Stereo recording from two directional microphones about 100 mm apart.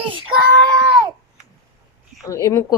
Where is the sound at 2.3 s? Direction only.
30° left (ahead or behind).